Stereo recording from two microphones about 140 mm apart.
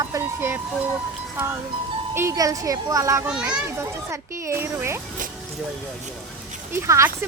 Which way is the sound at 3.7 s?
20° right (ahead or behind).